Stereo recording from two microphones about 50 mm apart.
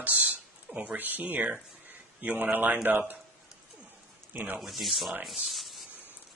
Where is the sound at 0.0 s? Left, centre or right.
Right.